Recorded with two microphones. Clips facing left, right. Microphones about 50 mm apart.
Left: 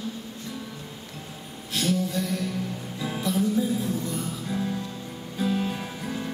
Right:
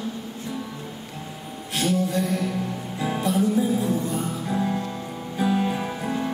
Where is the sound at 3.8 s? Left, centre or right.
Right.